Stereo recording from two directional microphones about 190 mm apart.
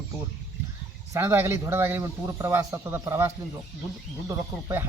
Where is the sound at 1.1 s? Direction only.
15° right (ahead or behind).